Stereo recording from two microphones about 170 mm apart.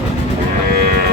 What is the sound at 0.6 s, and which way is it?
Livestock, 60° right (ahead or behind).